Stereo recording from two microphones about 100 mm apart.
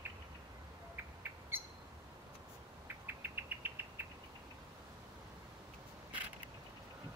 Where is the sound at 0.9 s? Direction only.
20° right (ahead or behind).